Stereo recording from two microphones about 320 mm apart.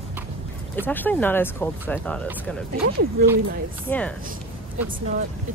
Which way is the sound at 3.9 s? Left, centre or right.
Centre.